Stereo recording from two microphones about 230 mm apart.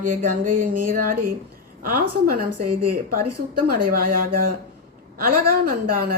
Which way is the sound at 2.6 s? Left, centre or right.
Right.